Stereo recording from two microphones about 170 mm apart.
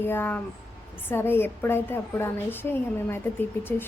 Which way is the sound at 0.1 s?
10° left (ahead or behind).